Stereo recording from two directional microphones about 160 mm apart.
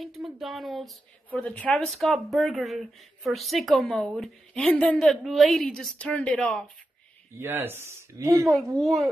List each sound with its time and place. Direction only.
0.0 s a woman's voice: centre (ahead or behind)
7.3 s speech: 15° right (ahead or behind)
8.7 s a woman's voice: centre (ahead or behind)